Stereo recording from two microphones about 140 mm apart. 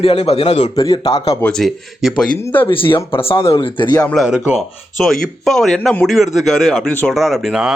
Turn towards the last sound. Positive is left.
turn(degrees=-5)  # may be behind; listen again after turning